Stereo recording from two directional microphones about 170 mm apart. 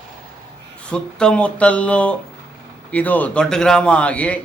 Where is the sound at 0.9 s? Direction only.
5° left (ahead or behind).